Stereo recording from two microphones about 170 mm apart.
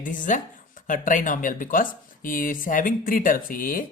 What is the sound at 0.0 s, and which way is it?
Speech, 50° left (ahead or behind).